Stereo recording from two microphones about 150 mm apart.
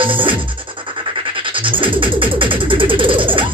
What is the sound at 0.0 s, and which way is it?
Music, 35° right (ahead or behind).